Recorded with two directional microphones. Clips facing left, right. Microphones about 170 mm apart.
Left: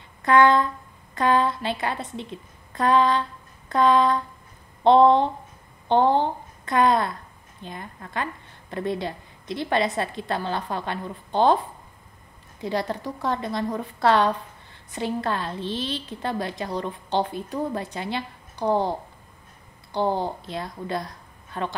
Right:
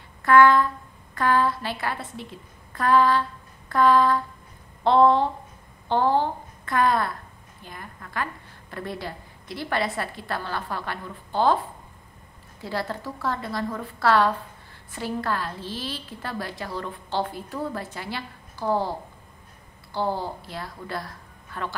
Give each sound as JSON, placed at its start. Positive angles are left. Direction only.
{"t": 0.2, "sound": "a woman's voice", "side_deg": 20}
{"t": 2.7, "sound": "a sound", "side_deg": 20}
{"t": 4.8, "sound": "a woman's voice", "side_deg": 20}
{"t": 12.5, "sound": "a woman's voice", "side_deg": 20}